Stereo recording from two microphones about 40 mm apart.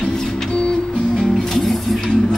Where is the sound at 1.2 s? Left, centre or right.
Centre.